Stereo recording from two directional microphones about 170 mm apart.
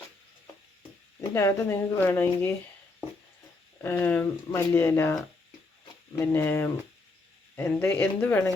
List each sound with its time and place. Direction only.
1.3 s speech: 15° left (ahead or behind)
3.8 s speech: 10° left (ahead or behind)